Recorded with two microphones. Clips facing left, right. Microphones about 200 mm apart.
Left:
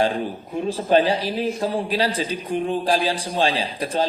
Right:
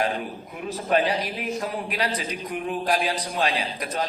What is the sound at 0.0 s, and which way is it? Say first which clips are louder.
A man's voice: left 5 dB; 30° left (ahead or behind).